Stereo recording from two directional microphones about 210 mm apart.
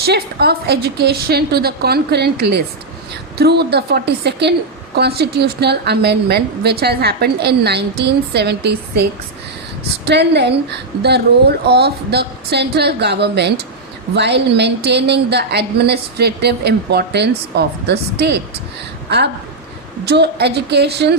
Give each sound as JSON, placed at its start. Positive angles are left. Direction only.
{"t": 0.0, "sound": "a woman's voice", "side_deg": -50}
{"t": 10.1, "sound": "a woman's voice", "side_deg": -55}
{"t": 20.1, "sound": "a woman's voice", "side_deg": -50}